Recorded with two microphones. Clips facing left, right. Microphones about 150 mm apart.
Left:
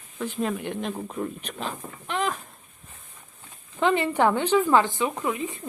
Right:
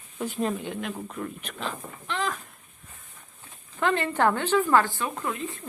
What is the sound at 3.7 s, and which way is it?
Speech, 15° left (ahead or behind).